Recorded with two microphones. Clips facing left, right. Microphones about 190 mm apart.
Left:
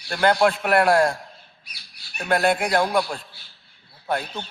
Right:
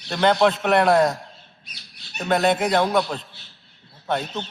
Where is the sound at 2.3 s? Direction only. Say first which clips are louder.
Right 1 dB; 10° left (ahead or behind).